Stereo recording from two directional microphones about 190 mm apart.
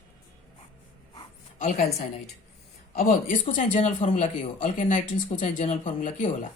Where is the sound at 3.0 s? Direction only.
40° left (ahead or behind).